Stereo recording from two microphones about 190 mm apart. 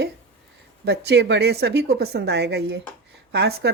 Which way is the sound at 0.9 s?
65° right (ahead or behind).